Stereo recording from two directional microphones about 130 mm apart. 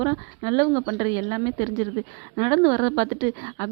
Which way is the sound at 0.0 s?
25° right (ahead or behind).